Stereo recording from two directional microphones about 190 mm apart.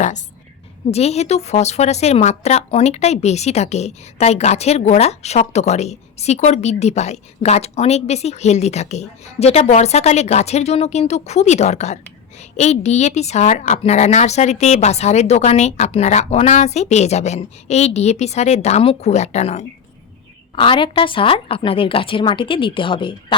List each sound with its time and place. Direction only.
0.9 s a woman's voice: 35° left (ahead or behind)